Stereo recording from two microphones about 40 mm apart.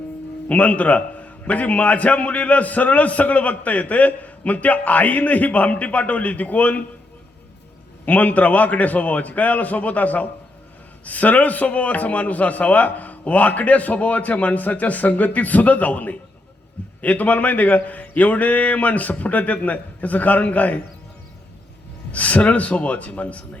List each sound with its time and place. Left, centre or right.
0.4 s a man's voice: left
8.0 s a man's voice: left
22.1 s a man's voice: left